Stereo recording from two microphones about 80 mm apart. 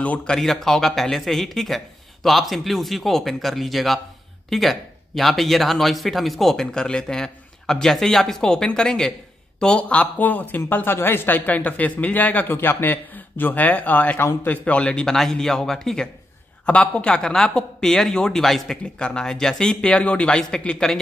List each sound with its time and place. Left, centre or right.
0.0 s a man's voice: centre
14.6 s speech: centre